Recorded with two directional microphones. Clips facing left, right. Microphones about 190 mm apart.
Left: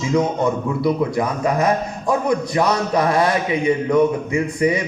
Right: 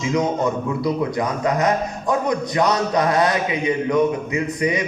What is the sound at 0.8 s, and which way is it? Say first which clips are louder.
A man's voice: left 4 dB; 25° left (ahead or behind).